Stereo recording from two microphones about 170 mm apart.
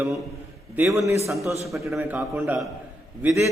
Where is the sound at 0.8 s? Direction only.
15° right (ahead or behind).